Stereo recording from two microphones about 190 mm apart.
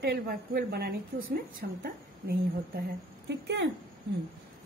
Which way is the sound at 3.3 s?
65° right (ahead or behind).